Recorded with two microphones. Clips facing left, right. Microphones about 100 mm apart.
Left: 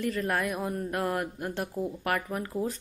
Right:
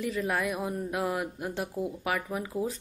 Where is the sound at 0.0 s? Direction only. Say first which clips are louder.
Left 1 dB; 5° right (ahead or behind).